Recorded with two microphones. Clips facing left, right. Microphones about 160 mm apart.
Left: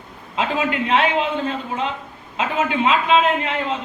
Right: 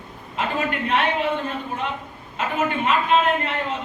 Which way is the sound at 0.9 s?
90° left.